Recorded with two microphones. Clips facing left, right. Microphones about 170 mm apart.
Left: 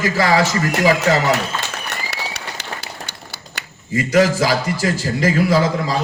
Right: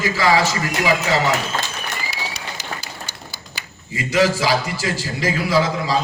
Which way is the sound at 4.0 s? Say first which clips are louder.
Left 3 dB; 45° left (ahead or behind).